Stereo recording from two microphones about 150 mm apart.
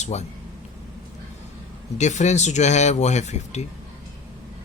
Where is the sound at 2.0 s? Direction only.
50° left (ahead or behind).